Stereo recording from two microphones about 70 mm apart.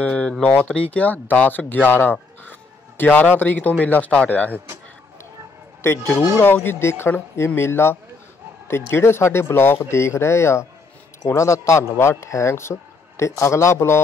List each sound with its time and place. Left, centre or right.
0.0 s speech: centre
5.8 s speech: left